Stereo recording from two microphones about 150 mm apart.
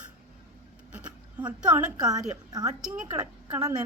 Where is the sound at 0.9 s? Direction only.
10° right (ahead or behind).